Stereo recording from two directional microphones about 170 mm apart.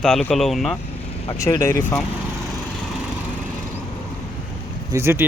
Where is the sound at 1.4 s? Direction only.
20° left (ahead or behind).